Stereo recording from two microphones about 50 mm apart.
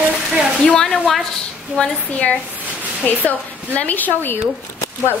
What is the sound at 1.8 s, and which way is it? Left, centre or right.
A woman's voice, left.